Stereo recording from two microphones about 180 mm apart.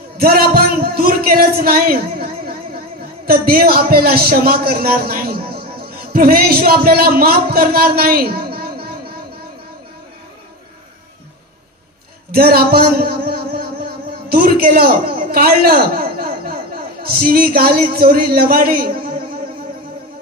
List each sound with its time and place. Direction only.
0.2 s a man's voice: 55° right (ahead or behind)
12.3 s speech: 60° right (ahead or behind)